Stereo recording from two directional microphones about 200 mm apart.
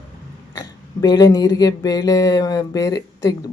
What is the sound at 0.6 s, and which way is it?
Speech, 20° left (ahead or behind).